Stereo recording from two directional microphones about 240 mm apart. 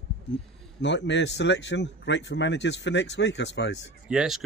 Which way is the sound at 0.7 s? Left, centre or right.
Left.